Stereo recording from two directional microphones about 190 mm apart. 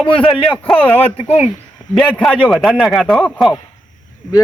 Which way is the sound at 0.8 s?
10° left (ahead or behind).